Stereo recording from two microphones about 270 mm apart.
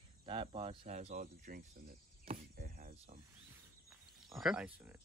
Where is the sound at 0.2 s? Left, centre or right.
Centre.